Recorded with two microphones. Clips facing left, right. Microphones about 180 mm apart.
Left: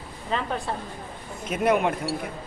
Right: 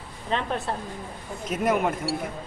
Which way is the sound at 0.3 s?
Centre (ahead or behind).